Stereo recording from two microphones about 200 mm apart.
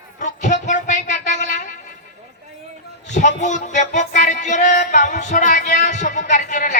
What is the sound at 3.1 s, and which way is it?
Music, 35° left (ahead or behind).